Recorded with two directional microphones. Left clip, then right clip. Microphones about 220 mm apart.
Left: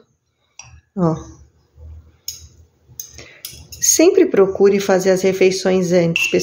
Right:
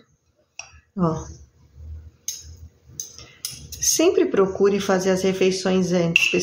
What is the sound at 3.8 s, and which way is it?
Speech, 30° left (ahead or behind).